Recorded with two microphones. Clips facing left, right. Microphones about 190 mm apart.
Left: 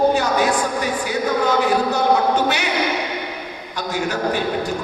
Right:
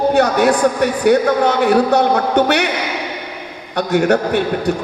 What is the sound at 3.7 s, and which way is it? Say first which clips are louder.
Speech: right 9 dB; 60° right (ahead or behind).